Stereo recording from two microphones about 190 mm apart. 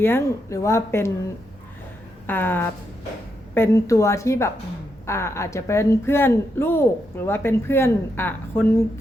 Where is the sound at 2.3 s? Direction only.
10° left (ahead or behind).